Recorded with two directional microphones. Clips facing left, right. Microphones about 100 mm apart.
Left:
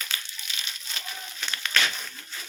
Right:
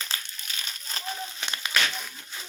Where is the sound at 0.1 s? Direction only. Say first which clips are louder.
Even; 35° right (ahead or behind).